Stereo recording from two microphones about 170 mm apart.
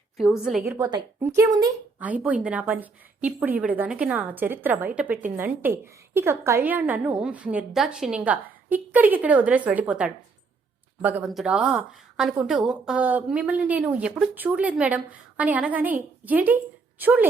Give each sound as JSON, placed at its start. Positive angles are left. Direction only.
{"t": 0.2, "sound": "a woman's voice", "side_deg": 0}
{"t": 0.8, "sound": "a woman's voice", "side_deg": -25}
{"t": 2.0, "sound": "speech", "side_deg": -10}